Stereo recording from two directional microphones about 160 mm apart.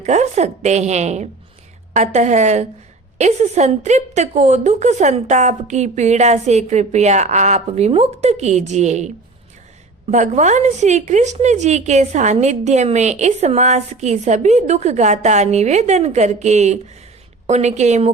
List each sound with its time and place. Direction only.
0.0 s speech: 45° right (ahead or behind)
10.1 s speech: 50° right (ahead or behind)